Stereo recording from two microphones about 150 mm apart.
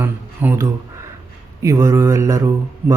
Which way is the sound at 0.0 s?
20° right (ahead or behind).